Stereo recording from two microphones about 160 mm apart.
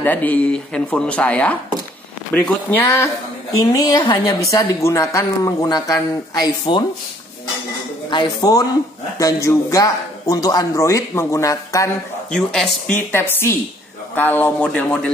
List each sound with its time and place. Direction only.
0.0 s a woman's voice: 10° left (ahead or behind); by 6.8 s 30° left (ahead or behind)
8.1 s a woman's voice: 25° left (ahead or behind)
12.3 s speech: 5° left (ahead or behind)